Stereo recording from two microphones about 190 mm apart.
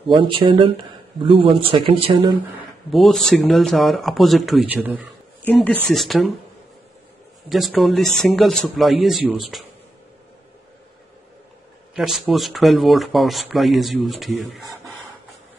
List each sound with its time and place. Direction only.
0.1 s speech: 25° right (ahead or behind)
2.9 s speech: centre (ahead or behind)
5.4 s speech: 10° left (ahead or behind)
7.4 s speech: centre (ahead or behind)
11.9 s speech: centre (ahead or behind)